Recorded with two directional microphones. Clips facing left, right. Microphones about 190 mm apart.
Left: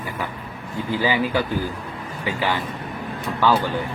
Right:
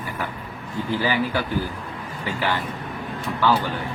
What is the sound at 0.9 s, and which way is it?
A man's voice, 15° left (ahead or behind).